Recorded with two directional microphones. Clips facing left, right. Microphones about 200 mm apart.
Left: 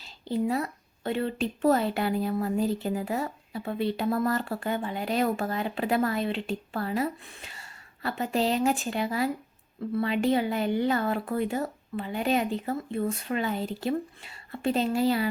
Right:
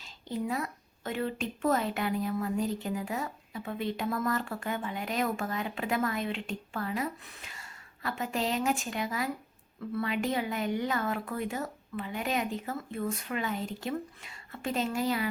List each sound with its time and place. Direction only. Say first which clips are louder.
0.0 s a woman's voice: left 6 dB; 30° left (ahead or behind)